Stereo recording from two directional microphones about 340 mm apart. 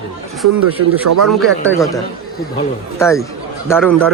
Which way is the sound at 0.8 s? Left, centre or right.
Right.